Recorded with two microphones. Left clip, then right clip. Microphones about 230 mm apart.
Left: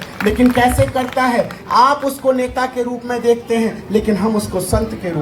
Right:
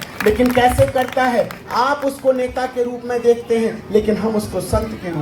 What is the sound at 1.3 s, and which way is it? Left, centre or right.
A man's voice, left.